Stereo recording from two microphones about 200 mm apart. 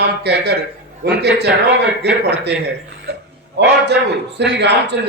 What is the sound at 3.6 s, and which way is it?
Speech, 60° right (ahead or behind).